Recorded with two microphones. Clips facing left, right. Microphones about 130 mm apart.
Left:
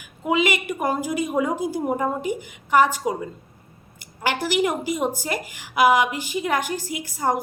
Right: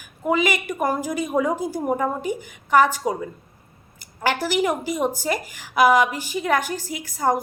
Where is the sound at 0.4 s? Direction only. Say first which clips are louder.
Even; 45° right (ahead or behind).